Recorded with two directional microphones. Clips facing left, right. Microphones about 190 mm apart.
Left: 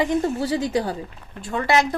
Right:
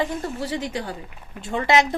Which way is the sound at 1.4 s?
20° right (ahead or behind).